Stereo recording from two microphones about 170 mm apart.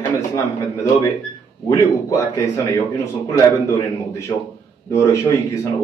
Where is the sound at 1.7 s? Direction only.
20° left (ahead or behind).